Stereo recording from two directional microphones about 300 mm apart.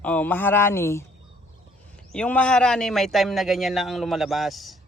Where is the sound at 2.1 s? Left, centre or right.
Centre.